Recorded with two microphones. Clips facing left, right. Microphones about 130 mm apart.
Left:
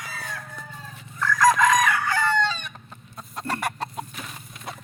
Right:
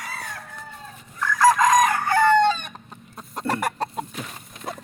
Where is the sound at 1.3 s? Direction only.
35° right (ahead or behind).